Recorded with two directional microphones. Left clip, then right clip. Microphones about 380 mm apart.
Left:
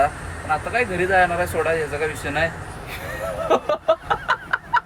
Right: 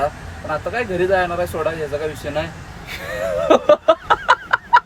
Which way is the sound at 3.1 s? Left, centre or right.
Centre.